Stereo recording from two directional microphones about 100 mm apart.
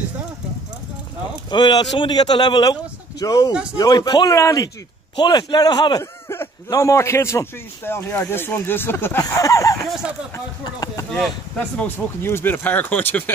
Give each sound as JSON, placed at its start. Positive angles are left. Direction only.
{"t": 1.5, "sound": "a man's voice", "side_deg": 45}
{"t": 5.1, "sound": "a man's voice", "side_deg": 45}
{"t": 9.8, "sound": "speech", "side_deg": -5}
{"t": 10.6, "sound": "speech", "side_deg": 35}
{"t": 11.8, "sound": "a man's voice", "side_deg": 25}